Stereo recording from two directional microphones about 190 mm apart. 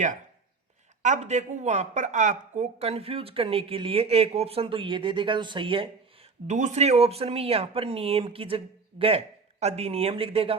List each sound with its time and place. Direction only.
1.0 s a woman's voice: 40° right (ahead or behind)
6.5 s a woman's voice: 40° right (ahead or behind)